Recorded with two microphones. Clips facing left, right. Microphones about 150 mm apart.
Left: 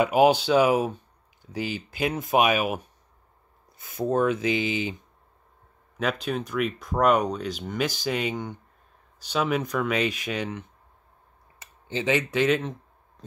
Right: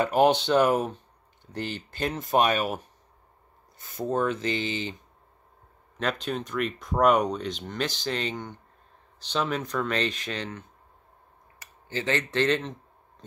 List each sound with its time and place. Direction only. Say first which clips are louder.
0.0 s speech: left 2 dB; 10° left (ahead or behind)
5.9 s speech: left 2 dB; 5° left (ahead or behind)
11.6 s speech: left 3 dB; 15° left (ahead or behind)